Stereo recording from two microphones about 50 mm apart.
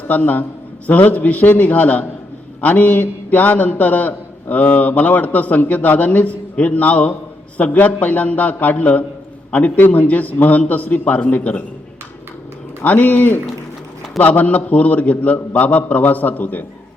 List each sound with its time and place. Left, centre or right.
0.1 s a man's voice: left
12.8 s a man's voice: left